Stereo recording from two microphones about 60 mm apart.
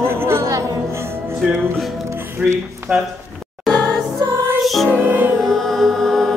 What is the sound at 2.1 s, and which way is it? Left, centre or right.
Music, right.